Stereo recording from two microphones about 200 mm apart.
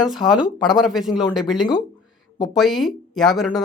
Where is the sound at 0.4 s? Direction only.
20° left (ahead or behind).